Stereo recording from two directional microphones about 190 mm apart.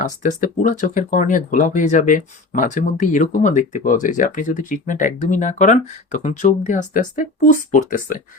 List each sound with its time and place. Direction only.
0.0 s speech: 40° left (ahead or behind)